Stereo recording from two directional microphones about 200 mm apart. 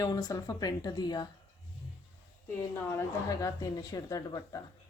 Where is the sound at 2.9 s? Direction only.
15° left (ahead or behind).